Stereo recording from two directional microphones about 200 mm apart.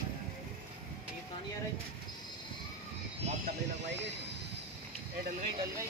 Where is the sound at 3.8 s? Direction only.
60° right (ahead or behind).